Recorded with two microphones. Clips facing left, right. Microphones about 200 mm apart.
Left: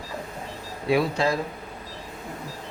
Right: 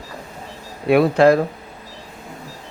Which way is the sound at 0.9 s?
60° right (ahead or behind).